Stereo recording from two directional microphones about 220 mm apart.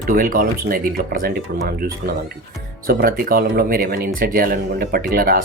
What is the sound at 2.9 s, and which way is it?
Speech, 40° right (ahead or behind).